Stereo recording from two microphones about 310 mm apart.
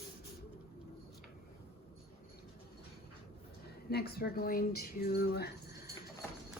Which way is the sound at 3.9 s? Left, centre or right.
Left.